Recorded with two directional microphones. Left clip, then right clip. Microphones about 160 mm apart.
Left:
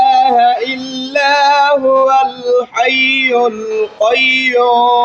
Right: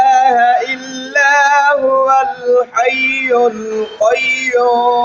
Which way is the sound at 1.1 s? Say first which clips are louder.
Even; 30° left (ahead or behind).